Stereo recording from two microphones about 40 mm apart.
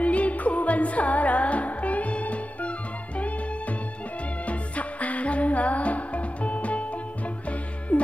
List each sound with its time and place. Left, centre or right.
0.0 s music: left
4.5 s music: left
7.9 s music: left